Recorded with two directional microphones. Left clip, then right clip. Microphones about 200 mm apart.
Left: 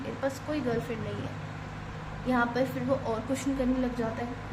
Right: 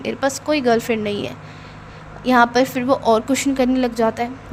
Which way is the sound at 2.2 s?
50° right (ahead or behind).